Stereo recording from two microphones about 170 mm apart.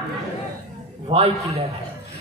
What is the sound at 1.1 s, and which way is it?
Speech, 35° right (ahead or behind).